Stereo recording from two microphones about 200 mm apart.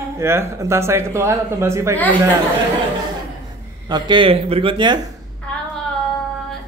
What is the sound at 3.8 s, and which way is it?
Speech, 20° right (ahead or behind).